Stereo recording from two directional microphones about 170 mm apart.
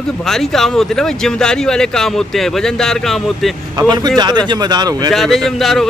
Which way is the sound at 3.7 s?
25° right (ahead or behind).